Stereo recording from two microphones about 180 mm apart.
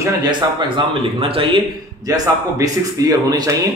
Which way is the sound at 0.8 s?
30° right (ahead or behind).